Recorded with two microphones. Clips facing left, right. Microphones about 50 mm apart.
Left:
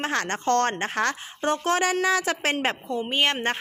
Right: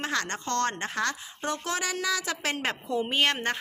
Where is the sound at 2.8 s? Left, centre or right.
Centre.